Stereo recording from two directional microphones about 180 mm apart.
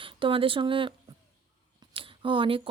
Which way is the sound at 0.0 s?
30° right (ahead or behind).